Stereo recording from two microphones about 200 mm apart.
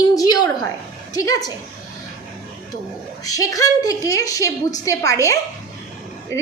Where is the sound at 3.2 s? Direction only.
15° left (ahead or behind).